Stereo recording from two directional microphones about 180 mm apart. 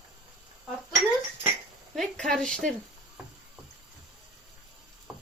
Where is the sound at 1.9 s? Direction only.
5° left (ahead or behind).